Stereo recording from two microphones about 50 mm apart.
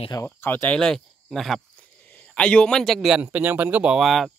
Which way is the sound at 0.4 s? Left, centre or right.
Left.